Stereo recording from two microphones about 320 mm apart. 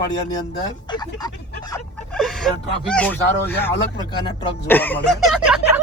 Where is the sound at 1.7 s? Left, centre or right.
Centre.